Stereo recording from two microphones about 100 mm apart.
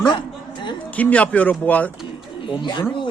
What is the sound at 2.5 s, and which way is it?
Speech, 55° left (ahead or behind).